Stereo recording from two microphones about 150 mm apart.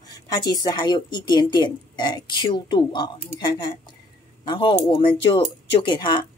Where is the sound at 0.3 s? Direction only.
25° left (ahead or behind).